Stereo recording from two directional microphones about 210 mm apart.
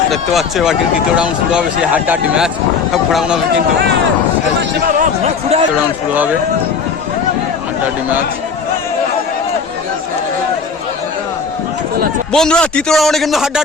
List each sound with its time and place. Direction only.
0.1 s speech: centre (ahead or behind)
4.9 s speech: 30° right (ahead or behind)
12.3 s speech: 5° left (ahead or behind)